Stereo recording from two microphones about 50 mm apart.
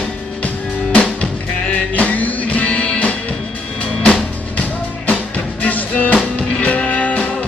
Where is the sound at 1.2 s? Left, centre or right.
Left.